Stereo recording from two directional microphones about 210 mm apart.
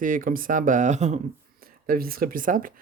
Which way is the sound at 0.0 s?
40° right (ahead or behind).